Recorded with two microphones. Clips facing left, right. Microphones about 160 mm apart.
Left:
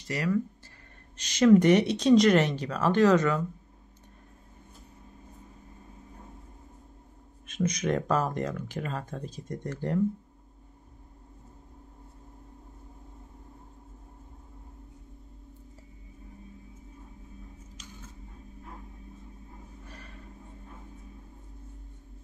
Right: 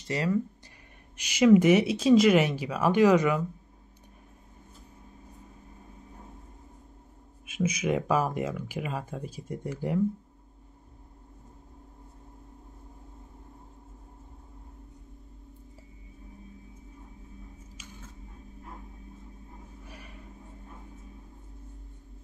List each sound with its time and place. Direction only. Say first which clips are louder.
0.1 s speech: right 1 dB; 25° right (ahead or behind)
1.1 s speech: even; 10° right (ahead or behind)
7.4 s speech: even; 5° right (ahead or behind)